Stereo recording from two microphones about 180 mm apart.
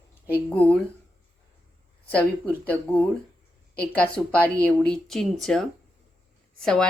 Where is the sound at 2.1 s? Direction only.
10° left (ahead or behind).